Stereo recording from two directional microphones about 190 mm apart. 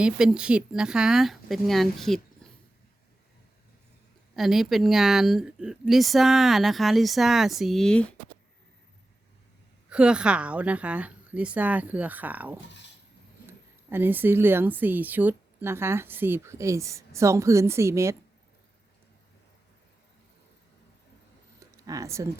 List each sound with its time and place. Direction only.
0.0 s speech: 5° right (ahead or behind)
4.4 s speech: centre (ahead or behind)
9.9 s speech: 5° right (ahead or behind)
21.6 s a sound: 15° right (ahead or behind)